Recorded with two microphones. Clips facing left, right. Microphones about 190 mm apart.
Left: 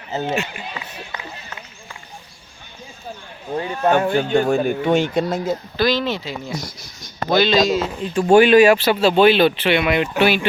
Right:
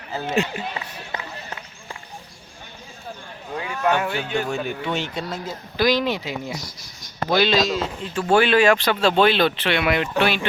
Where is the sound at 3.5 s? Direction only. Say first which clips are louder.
Left 4 dB; 35° left (ahead or behind).